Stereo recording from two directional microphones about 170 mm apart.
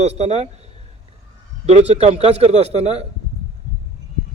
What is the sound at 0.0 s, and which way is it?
Speech, 40° right (ahead or behind).